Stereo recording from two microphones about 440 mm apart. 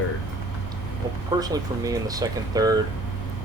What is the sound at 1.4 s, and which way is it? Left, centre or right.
Speech, centre.